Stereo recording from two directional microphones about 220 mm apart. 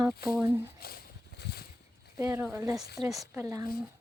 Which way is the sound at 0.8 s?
45° left (ahead or behind).